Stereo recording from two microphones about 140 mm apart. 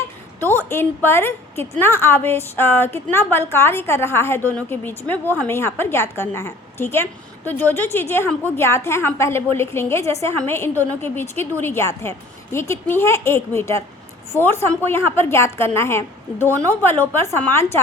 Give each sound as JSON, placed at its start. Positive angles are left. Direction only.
{"t": 0.3, "sound": "a woman's voice", "side_deg": 15}